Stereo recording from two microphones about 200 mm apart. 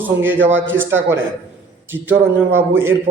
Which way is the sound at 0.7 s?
75° right (ahead or behind).